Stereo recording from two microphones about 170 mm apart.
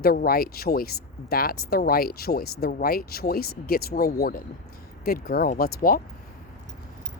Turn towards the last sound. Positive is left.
turn(degrees=55)  # may be behind; listen again after turning